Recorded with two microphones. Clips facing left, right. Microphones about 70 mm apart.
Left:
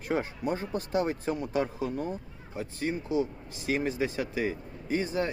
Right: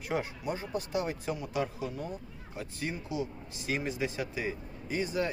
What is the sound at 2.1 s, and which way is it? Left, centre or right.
Speech, left.